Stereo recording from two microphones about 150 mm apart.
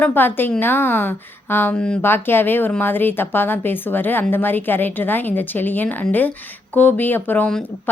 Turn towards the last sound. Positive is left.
turn(degrees=10)  # may be behind; listen again after turning